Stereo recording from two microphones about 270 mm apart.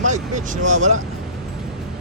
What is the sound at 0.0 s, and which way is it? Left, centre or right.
Speech, right.